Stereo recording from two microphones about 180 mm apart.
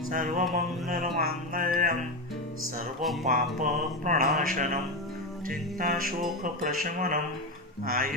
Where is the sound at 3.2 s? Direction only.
50° right (ahead or behind).